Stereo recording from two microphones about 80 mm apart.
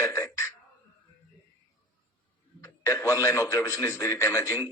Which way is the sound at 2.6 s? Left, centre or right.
Left.